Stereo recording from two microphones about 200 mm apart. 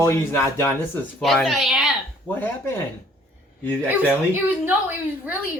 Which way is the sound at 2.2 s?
10° left (ahead or behind).